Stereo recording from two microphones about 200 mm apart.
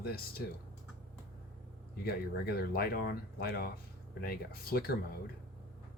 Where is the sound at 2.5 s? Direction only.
50° left (ahead or behind).